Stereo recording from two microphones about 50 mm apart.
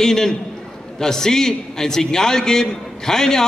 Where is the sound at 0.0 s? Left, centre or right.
Centre.